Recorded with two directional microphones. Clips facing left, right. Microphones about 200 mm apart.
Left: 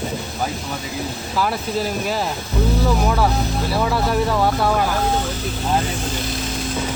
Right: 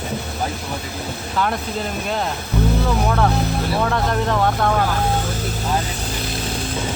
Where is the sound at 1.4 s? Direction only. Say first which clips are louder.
Left 1 dB; 5° left (ahead or behind).